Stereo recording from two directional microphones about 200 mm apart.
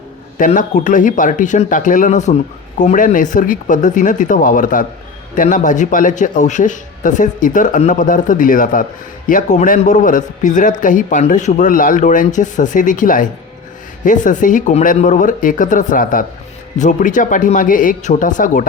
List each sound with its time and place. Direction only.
0.3 s a man's voice: 40° left (ahead or behind)